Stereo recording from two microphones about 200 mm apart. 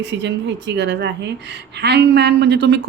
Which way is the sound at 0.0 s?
60° right (ahead or behind).